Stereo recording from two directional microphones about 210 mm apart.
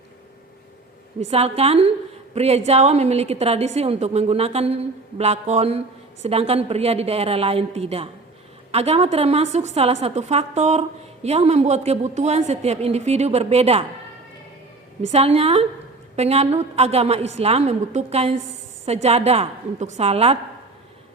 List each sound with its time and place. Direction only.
1.3 s a woman's voice: 30° right (ahead or behind)
15.0 s a woman's voice: 30° right (ahead or behind)